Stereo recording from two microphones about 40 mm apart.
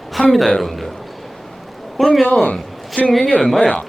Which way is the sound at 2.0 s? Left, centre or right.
Centre.